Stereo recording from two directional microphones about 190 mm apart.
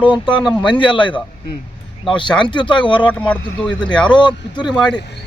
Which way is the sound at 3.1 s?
5° left (ahead or behind).